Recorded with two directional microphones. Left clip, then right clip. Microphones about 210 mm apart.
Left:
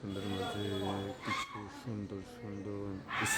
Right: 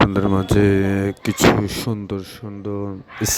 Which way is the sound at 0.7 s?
55° right (ahead or behind).